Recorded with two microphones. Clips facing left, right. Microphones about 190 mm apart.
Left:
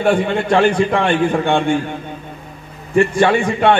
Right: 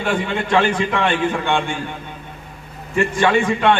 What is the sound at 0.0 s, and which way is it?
A man's voice, 50° left (ahead or behind).